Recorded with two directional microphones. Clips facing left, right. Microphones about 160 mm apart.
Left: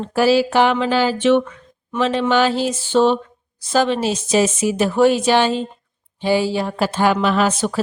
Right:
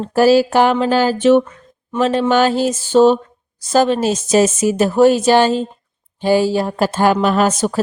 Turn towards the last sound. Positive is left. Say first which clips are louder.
# right 3 dB
turn(degrees=-40)  # may be behind; listen again after turning